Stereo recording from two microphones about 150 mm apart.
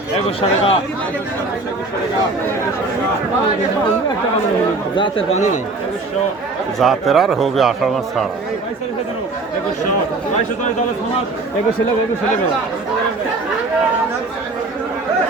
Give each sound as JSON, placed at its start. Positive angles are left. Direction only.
{"t": 0.3, "sound": "speech", "side_deg": 40}
{"t": 4.9, "sound": "speech", "side_deg": 30}
{"t": 6.7, "sound": "a man's voice", "side_deg": 0}